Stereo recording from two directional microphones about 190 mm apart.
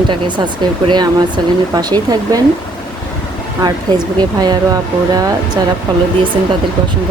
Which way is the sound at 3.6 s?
20° right (ahead or behind).